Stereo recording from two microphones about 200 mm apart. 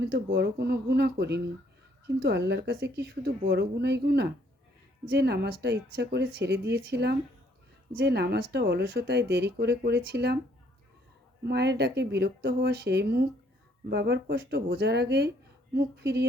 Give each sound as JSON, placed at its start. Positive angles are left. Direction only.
{"t": 0.0, "sound": "speech", "side_deg": -55}
{"t": 11.4, "sound": "speech", "side_deg": -55}